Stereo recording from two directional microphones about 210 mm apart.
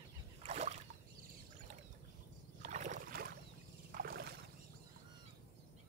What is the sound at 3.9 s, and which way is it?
Rowboat, 45° right (ahead or behind).